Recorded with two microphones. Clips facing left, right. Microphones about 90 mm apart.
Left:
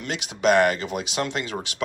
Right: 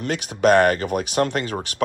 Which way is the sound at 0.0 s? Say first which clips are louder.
Right 4 dB; 40° right (ahead or behind).